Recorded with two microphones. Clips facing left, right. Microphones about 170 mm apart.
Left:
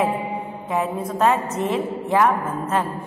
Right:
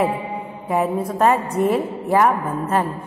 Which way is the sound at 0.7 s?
10° right (ahead or behind).